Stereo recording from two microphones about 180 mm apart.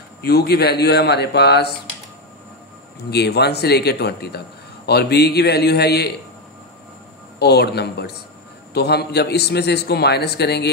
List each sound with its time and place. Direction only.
0.2 s a man's voice: 60° left (ahead or behind)
3.1 s a man's voice: 65° left (ahead or behind)
7.3 s a man's voice: 65° left (ahead or behind)